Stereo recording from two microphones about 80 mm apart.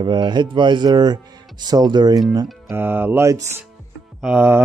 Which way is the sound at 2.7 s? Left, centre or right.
Right.